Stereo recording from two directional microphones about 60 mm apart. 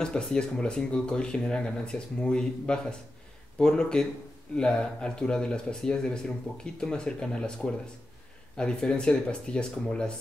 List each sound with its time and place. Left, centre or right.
0.0 s speech: centre